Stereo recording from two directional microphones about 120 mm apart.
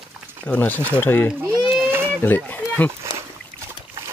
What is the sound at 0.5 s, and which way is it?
Speech, 15° left (ahead or behind).